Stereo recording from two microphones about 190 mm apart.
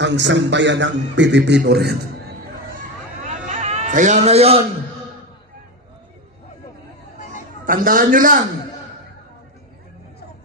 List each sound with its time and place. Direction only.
0.0 s a man's voice: 70° right (ahead or behind)
3.4 s cat: 35° right (ahead or behind)
7.6 s a woman's voice: 45° right (ahead or behind)